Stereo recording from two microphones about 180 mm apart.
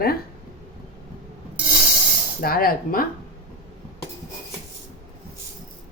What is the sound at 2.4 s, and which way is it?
Speech, 55° left (ahead or behind).